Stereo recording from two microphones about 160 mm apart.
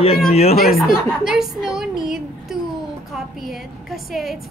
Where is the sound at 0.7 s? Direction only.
Centre (ahead or behind).